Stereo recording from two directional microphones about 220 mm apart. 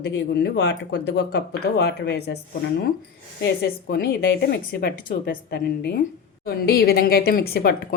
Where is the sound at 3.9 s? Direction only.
50° left (ahead or behind).